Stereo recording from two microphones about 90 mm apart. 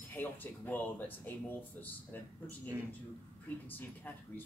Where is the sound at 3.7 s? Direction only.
20° left (ahead or behind).